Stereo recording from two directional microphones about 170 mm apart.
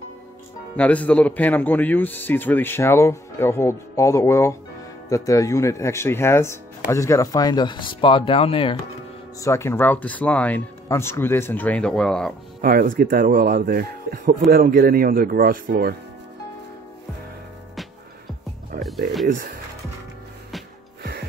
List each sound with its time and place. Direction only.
0.7 s a man's voice: 10° left (ahead or behind); by 8.7 s 35° left (ahead or behind)
9.4 s a man's voice: 15° left (ahead or behind)
12.6 s speech: 55° right (ahead or behind)
19.2 s speech: 55° right (ahead or behind)
21.0 s music: 70° right (ahead or behind)